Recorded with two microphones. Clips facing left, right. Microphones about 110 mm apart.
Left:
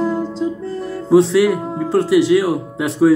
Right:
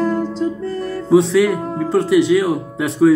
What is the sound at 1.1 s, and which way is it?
Speech, 5° left (ahead or behind).